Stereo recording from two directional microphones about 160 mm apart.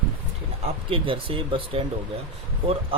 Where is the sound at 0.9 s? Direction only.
35° right (ahead or behind).